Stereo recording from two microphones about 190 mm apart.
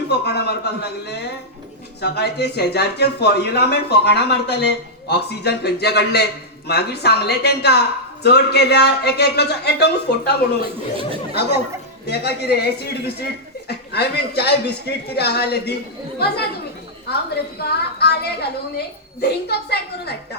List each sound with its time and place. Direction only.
0.1 s speech: 60° left (ahead or behind)
10.9 s chatter: 30° right (ahead or behind)
12.0 s speech: 60° left (ahead or behind)
17.6 s speech: 60° left (ahead or behind)